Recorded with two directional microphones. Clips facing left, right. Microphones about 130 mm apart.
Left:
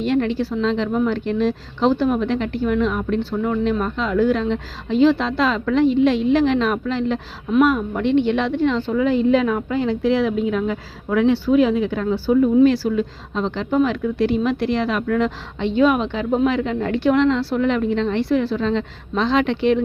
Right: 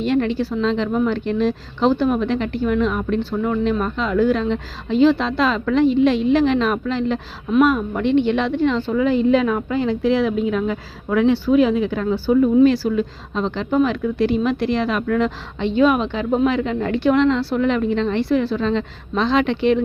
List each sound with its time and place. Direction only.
0.0 s a woman's voice: 20° right (ahead or behind)